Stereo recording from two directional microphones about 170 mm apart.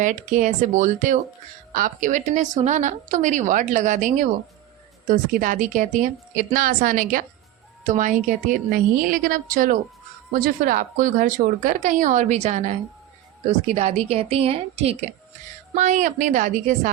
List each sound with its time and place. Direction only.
0.0 s a woman's voice: 50° right (ahead or behind)
13.7 s a woman's voice: 40° right (ahead or behind)